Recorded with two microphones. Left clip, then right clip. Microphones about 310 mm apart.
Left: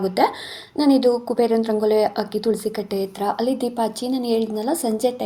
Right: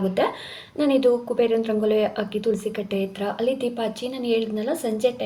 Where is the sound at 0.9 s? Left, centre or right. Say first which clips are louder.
Right 2 dB; left.